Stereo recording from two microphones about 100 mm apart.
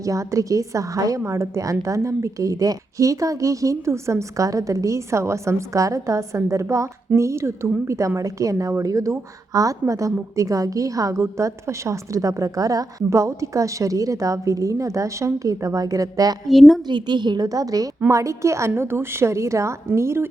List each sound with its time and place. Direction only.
0.0 s a woman's voice: 35° right (ahead or behind)
16.5 s a woman's voice: centre (ahead or behind)
16.8 s a woman's voice: 50° right (ahead or behind); by 20.2 s 25° right (ahead or behind)